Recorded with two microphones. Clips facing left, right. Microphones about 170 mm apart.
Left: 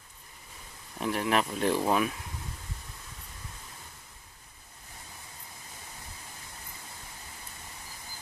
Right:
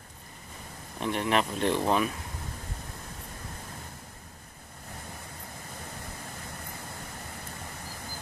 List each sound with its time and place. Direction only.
0.9 s speech: 5° left (ahead or behind)